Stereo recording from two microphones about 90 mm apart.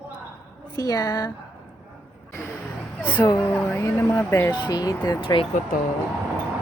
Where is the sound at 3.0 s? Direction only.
15° left (ahead or behind).